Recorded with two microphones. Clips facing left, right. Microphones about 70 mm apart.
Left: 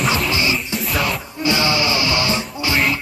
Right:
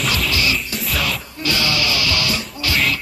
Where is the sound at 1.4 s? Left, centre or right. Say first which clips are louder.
Left 3 dB; left.